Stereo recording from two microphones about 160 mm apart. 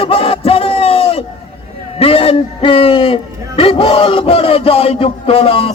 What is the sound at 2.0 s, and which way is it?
A man's voice, 35° left (ahead or behind).